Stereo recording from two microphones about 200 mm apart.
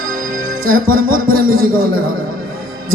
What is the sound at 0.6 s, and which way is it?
Music, 45° right (ahead or behind).